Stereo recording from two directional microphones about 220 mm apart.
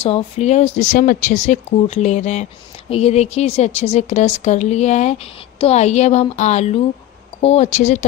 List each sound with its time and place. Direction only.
0.0 s speech: 30° left (ahead or behind)